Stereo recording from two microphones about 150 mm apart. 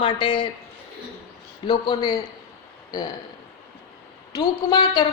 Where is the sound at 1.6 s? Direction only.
30° left (ahead or behind).